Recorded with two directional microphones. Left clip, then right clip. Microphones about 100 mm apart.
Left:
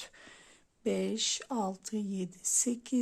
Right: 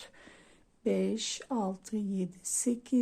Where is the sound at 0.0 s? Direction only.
25° left (ahead or behind).